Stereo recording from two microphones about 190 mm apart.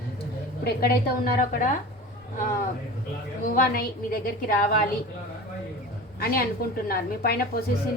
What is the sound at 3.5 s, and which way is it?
A woman's voice, 50° left (ahead or behind).